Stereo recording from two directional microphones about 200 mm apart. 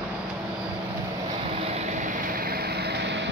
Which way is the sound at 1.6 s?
35° right (ahead or behind).